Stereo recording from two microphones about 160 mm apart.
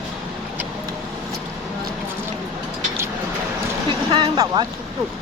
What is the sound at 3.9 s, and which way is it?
Vehicle, 30° right (ahead or behind).